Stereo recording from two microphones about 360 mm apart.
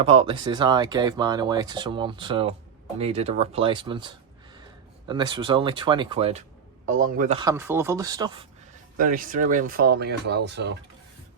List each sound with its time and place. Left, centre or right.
0.0 s speech: centre
9.0 s speech: right